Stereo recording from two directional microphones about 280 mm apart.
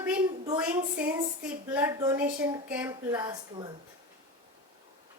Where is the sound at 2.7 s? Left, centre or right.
Centre.